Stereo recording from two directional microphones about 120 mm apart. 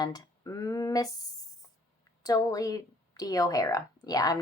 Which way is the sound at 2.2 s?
30° left (ahead or behind).